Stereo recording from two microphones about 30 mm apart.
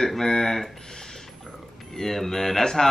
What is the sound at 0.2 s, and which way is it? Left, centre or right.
Speech, centre.